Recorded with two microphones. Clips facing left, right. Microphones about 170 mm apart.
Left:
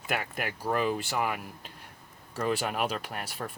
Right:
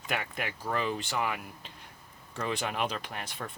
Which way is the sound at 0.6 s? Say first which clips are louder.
Left 4 dB; 10° left (ahead or behind).